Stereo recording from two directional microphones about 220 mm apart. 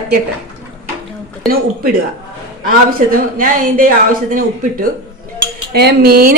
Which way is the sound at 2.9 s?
40° right (ahead or behind).